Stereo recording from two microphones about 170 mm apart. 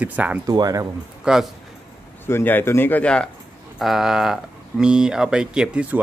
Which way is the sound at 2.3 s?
15° left (ahead or behind).